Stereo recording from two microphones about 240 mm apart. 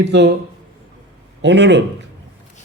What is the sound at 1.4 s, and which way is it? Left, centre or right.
Speech, right.